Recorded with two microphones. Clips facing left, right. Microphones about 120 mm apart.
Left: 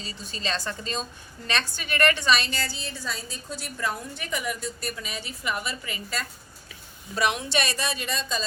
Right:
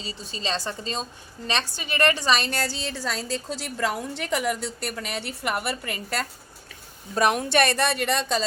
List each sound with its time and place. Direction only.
0.0 s a woman's voice: 25° right (ahead or behind)
2.5 s a woman's voice: 75° right (ahead or behind)
7.2 s speech: 45° right (ahead or behind); by 8.4 s 70° right (ahead or behind)